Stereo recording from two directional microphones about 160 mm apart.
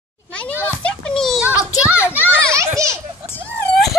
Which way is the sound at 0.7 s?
5° left (ahead or behind).